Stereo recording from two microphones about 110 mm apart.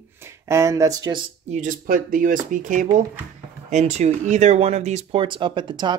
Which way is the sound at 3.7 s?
90° right.